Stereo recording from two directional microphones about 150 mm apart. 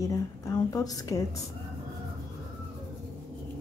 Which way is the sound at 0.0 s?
25° left (ahead or behind).